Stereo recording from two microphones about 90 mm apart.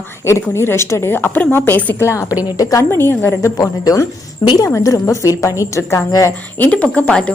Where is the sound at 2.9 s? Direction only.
25° left (ahead or behind); by 6.3 s 45° left (ahead or behind).